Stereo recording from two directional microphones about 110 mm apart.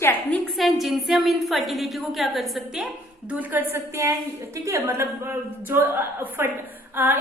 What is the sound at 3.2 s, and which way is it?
A woman's voice, 15° right (ahead or behind).